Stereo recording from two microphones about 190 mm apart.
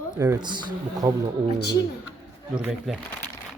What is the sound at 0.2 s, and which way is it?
Speech, 20° right (ahead or behind).